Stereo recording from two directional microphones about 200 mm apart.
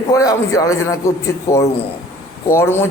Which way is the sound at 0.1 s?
15° left (ahead or behind).